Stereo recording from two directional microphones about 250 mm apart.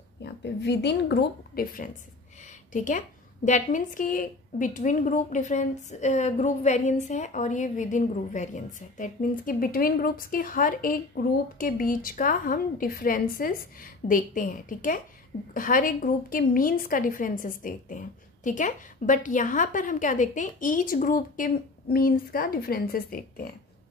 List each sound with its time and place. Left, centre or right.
0.2 s a woman's voice: left